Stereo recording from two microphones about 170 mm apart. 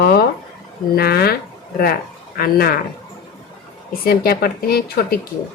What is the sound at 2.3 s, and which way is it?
Speech, 60° left (ahead or behind).